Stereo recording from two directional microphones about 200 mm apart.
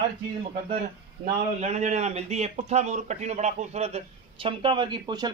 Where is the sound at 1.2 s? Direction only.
35° right (ahead or behind).